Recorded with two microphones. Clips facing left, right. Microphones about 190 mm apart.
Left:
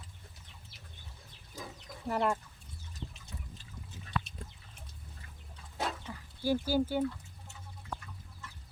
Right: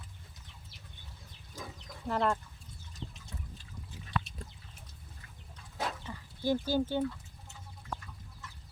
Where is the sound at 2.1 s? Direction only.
10° left (ahead or behind).